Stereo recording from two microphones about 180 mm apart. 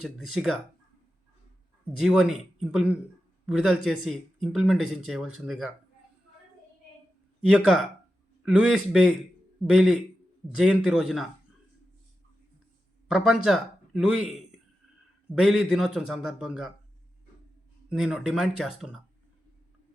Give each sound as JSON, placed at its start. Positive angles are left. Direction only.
{"t": 0.0, "sound": "speech", "side_deg": 0}
{"t": 2.0, "sound": "speech", "side_deg": 0}
{"t": 7.4, "sound": "speech", "side_deg": 0}
{"t": 13.1, "sound": "a man's voice", "side_deg": -5}
{"t": 17.8, "sound": "speech", "side_deg": -5}